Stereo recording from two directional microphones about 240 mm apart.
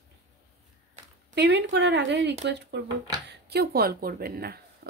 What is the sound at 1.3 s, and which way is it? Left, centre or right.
Speech, right.